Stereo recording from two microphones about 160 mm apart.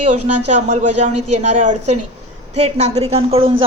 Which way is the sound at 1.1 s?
45° right (ahead or behind).